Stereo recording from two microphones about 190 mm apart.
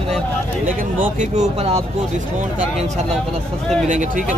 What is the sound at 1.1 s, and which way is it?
Speech, 35° right (ahead or behind).